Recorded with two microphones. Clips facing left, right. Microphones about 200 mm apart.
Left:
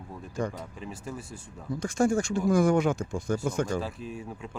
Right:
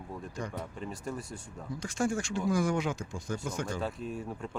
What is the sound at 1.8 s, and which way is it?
Speech, 45° left (ahead or behind).